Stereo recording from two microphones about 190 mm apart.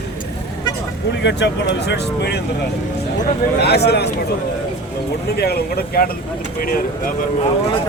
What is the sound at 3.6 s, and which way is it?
Speech, 60° left (ahead or behind).